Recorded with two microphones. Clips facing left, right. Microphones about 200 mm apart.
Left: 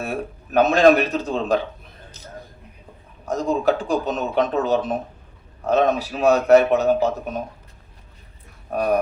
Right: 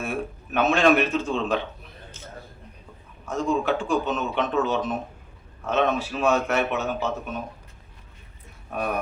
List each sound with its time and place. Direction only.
0.0 s a man's voice: 35° left (ahead or behind)
3.2 s a man's voice: 35° left (ahead or behind)
8.7 s a man's voice: 40° left (ahead or behind)